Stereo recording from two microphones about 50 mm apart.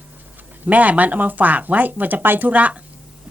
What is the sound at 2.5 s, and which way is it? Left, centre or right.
Speech, right.